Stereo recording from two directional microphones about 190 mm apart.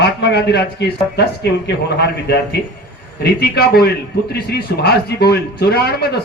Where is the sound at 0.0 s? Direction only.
65° left (ahead or behind).